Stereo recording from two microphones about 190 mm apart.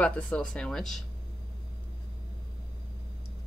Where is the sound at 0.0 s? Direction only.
5° left (ahead or behind).